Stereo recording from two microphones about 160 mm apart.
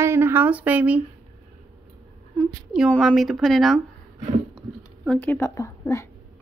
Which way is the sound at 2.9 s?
Centre (ahead or behind).